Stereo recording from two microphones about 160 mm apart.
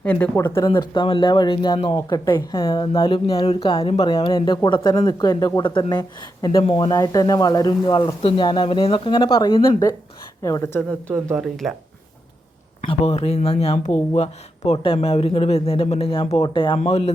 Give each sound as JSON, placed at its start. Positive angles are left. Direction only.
{"t": 0.0, "sound": "speech", "side_deg": 10}
{"t": 0.4, "sound": "speech", "side_deg": 30}
{"t": 3.0, "sound": "speech", "side_deg": 35}
{"t": 10.4, "sound": "speech", "side_deg": 20}
{"t": 11.3, "sound": "speech", "side_deg": 0}
{"t": 12.8, "sound": "speech", "side_deg": 35}